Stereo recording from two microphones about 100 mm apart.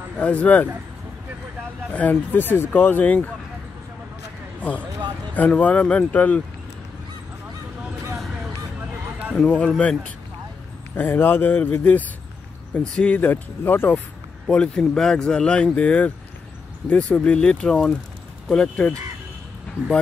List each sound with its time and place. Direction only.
0.2 s speech: 15° left (ahead or behind)
1.9 s speech: 15° left (ahead or behind)
4.6 s speech: 15° left (ahead or behind)
9.4 s speech: 10° left (ahead or behind)
14.5 s speech: 10° left (ahead or behind)